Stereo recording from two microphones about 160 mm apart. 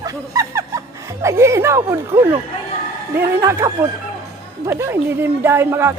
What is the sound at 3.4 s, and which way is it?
Speech, 15° right (ahead or behind).